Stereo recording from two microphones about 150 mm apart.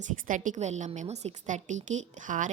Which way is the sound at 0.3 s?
60° right (ahead or behind).